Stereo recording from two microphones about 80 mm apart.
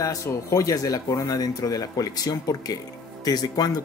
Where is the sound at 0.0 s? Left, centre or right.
Left.